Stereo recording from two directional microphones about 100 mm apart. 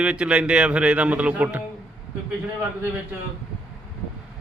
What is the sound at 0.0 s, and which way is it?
Speech, 10° right (ahead or behind).